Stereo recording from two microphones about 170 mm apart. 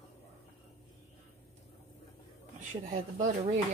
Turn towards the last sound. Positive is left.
turn(degrees=-50)  # may be behind; listen again after turning